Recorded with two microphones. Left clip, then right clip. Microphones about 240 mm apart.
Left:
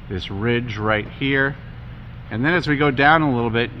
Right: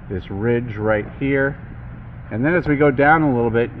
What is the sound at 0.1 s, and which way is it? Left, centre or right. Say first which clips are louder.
Speech: right 2 dB; left.